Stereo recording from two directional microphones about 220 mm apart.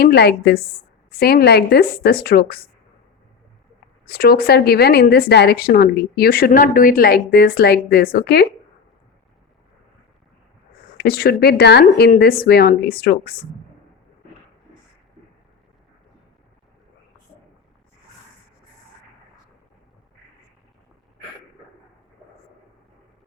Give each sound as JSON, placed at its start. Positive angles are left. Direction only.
{"t": 0.0, "sound": "a woman's voice", "side_deg": 45}
{"t": 4.0, "sound": "a woman's voice", "side_deg": 45}
{"t": 10.9, "sound": "a woman's voice", "side_deg": 45}